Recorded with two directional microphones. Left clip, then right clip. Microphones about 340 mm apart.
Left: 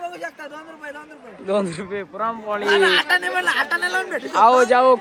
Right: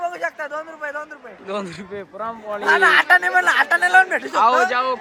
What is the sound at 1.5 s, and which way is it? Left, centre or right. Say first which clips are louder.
A man's voice: left 6 dB; centre.